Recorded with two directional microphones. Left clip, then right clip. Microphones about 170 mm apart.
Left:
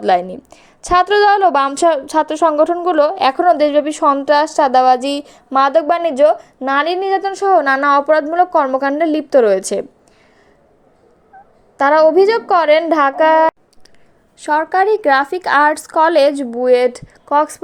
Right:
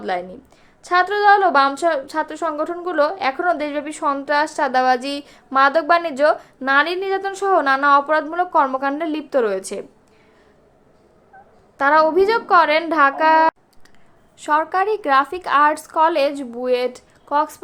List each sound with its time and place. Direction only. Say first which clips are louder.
0.0 s a woman's voice: left 10 dB; 45° left (ahead or behind)
11.8 s a woman's voice: left 5 dB; 25° left (ahead or behind)